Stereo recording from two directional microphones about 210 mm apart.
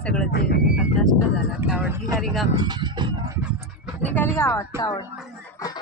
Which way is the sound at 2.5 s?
20° right (ahead or behind).